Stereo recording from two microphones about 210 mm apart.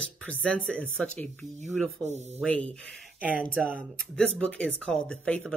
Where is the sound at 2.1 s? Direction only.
30° right (ahead or behind).